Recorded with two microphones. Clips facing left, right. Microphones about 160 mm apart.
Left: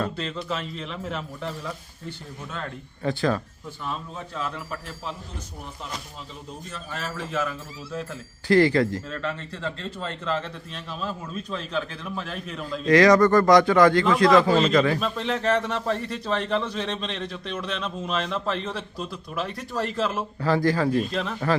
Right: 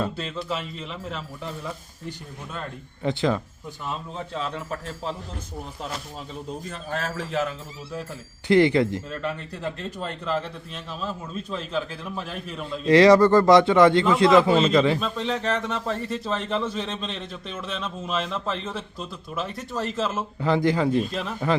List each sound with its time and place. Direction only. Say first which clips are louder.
0.0 s speech: even; 5° right (ahead or behind)
2.0 s speech: even; 10° right (ahead or behind)
7.2 s speech: even; 30° right (ahead or behind)
8.4 s speech: right 1 dB; 20° right (ahead or behind); by 12.8 s 5° right (ahead or behind)
12.8 s speech: right 2 dB; 30° right (ahead or behind)
14.6 s speech: right 1 dB; centre (ahead or behind)
20.4 s speech: right 1 dB; 20° right (ahead or behind)
21.0 s speech: left 1 dB; centre (ahead or behind)